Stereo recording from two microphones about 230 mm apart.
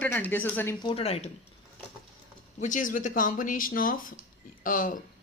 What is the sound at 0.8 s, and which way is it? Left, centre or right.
Speech, left.